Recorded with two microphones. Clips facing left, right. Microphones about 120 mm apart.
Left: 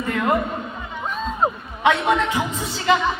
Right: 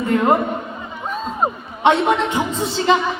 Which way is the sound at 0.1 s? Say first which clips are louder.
Right 7 dB; 35° right (ahead or behind).